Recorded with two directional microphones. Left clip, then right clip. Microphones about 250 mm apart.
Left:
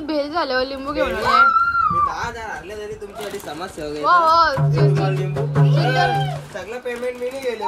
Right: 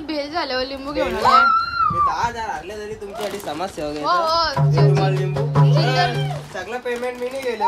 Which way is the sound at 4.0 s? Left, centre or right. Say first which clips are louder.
Left 5 dB; centre.